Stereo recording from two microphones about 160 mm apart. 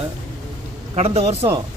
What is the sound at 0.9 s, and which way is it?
Speech, 40° right (ahead or behind).